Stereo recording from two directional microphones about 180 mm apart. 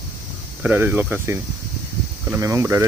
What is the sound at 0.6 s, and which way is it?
Speech, 10° right (ahead or behind).